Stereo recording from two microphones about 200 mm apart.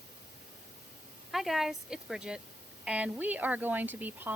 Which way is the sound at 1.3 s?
Centre (ahead or behind).